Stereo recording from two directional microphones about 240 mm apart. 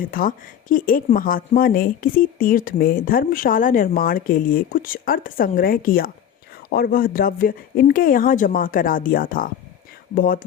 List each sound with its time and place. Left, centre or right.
0.0 s speech: left